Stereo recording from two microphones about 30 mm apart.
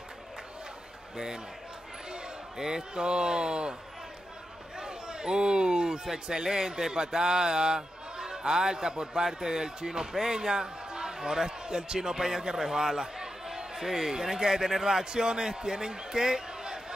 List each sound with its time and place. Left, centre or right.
1.1 s speech: right
2.5 s speech: centre
2.9 s speech: right
4.7 s a sound: right
6.1 s speech: right